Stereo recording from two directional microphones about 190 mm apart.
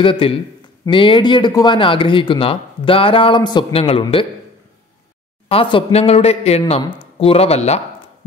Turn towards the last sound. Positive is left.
turn(degrees=35)  # may be behind; listen again after turning